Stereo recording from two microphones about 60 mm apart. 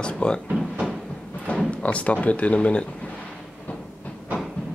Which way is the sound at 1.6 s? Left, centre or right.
Left.